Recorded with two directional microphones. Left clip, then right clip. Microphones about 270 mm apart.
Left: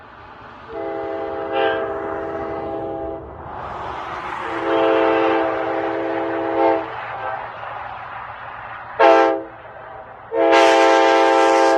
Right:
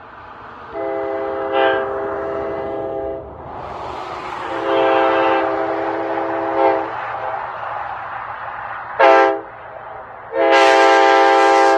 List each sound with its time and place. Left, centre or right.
0.7 s train: centre
1.9 s train: centre
3.6 s vehicle: right
5.1 s train: centre
5.5 s train: right